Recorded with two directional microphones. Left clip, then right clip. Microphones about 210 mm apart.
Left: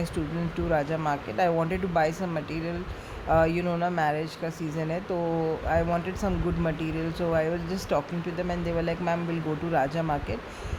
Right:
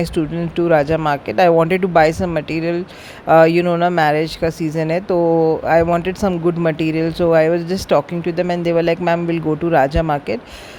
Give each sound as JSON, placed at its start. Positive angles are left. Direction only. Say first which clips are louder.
{"t": 0.5, "sound": "speech", "louder": "right 13 dB", "side_deg": -40}